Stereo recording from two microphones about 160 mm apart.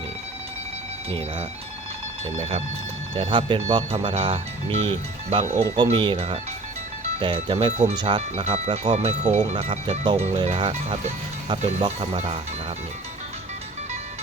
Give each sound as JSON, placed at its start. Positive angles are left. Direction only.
{"t": 2.4, "sound": "speech", "side_deg": -40}
{"t": 5.7, "sound": "speech", "side_deg": -30}
{"t": 7.7, "sound": "speech", "side_deg": -45}
{"t": 7.9, "sound": "speech", "side_deg": -30}